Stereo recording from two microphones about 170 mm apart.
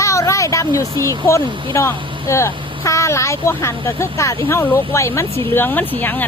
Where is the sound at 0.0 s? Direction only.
20° left (ahead or behind).